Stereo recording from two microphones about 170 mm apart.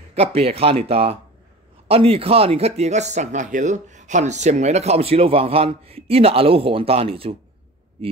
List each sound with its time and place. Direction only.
0.1 s speech: 35° right (ahead or behind)